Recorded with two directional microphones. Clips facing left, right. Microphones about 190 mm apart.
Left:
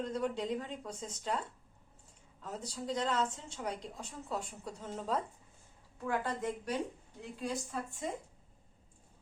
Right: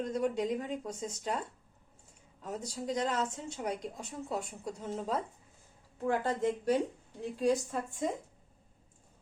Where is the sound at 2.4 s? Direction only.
15° right (ahead or behind).